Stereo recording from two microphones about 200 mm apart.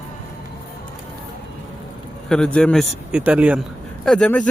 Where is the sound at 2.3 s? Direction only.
5° left (ahead or behind).